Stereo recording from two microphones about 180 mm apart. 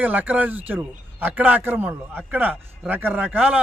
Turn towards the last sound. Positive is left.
turn(degrees=-10)  # may be behind; listen again after turning